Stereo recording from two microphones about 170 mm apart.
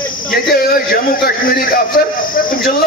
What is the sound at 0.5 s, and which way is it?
Speech, 60° left (ahead or behind).